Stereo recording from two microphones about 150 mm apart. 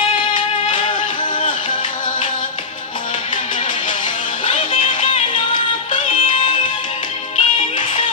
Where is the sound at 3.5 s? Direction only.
60° left (ahead or behind).